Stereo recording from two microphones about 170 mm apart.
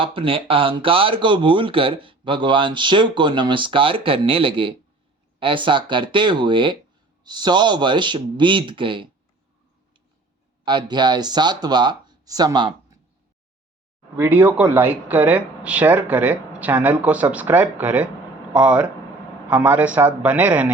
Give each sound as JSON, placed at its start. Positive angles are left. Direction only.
{"t": 0.0, "sound": "speech", "side_deg": -30}
{"t": 10.7, "sound": "speech", "side_deg": -25}
{"t": 14.2, "sound": "speech", "side_deg": -10}